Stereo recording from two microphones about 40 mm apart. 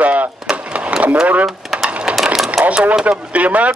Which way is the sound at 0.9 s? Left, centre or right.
Right.